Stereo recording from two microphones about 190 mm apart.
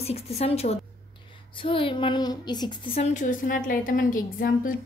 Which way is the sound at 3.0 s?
40° left (ahead or behind).